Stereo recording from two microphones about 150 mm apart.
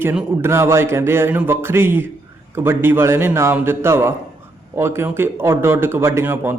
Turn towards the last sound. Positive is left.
turn(degrees=-15)  # may be behind; listen again after turning